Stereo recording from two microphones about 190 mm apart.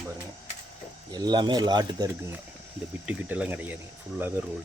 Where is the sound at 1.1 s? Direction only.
20° right (ahead or behind).